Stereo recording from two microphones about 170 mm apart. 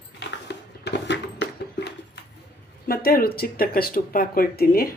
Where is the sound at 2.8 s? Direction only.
60° left (ahead or behind).